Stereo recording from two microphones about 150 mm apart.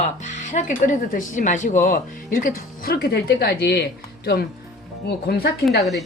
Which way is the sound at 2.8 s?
90° left.